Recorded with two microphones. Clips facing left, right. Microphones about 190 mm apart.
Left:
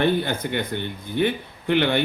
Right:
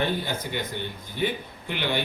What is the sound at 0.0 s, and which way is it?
Speech, 60° left (ahead or behind).